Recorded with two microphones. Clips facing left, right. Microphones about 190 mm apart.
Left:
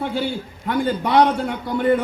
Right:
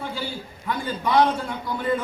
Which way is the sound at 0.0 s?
65° left (ahead or behind).